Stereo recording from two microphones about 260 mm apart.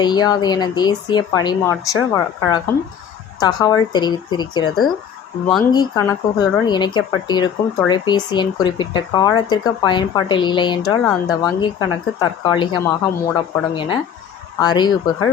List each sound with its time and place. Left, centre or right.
0.0 s speech: centre